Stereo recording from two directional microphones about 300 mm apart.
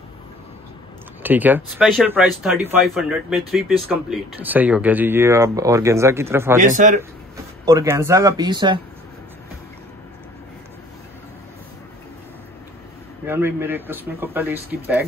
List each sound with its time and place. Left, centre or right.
1.2 s speech: centre
6.6 s a man's voice: right
7.6 s speech: centre
13.3 s speech: centre